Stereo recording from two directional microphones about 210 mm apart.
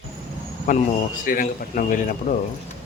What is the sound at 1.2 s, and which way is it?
A man's voice, 40° left (ahead or behind).